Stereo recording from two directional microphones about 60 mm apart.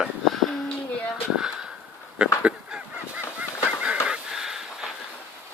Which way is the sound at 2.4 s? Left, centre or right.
Right.